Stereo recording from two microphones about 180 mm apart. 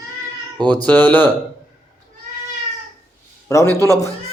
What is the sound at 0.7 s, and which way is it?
Speech, 10° left (ahead or behind).